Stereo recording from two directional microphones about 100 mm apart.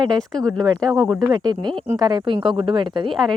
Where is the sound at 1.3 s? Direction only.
50° right (ahead or behind).